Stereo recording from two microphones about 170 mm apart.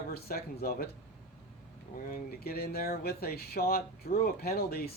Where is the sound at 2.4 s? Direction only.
60° left (ahead or behind).